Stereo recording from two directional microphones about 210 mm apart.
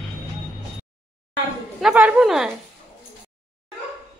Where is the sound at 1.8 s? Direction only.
5° right (ahead or behind).